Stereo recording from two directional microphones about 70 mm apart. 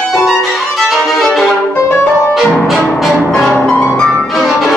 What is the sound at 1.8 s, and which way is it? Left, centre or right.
Music, left.